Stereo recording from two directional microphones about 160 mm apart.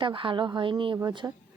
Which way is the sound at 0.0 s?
30° right (ahead or behind).